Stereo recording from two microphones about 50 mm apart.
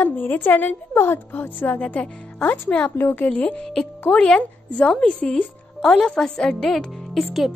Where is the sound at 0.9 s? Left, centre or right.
Left.